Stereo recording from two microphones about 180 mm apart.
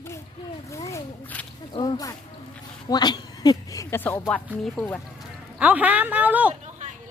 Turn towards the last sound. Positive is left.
turn(degrees=-10)  # may be behind; listen again after turning